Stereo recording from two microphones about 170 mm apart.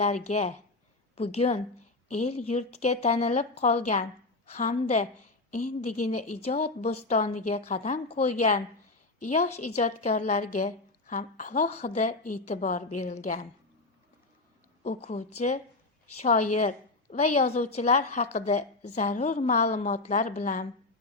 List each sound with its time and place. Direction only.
0.0 s a woman's voice: 40° left (ahead or behind)
14.8 s a woman's voice: 45° left (ahead or behind)